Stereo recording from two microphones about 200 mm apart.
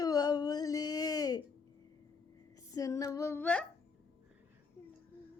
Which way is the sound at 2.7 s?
15° left (ahead or behind).